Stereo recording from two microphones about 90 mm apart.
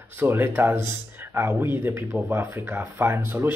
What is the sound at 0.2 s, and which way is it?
Speech, 25° right (ahead or behind).